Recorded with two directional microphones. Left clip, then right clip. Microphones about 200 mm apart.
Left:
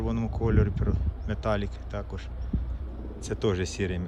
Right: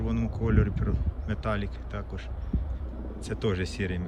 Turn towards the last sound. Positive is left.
turn(degrees=15)  # may be behind; listen again after turning